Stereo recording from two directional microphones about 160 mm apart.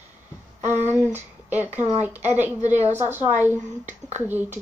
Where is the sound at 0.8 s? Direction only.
15° right (ahead or behind).